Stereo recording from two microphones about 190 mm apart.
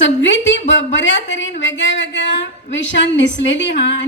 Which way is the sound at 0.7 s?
75° left (ahead or behind).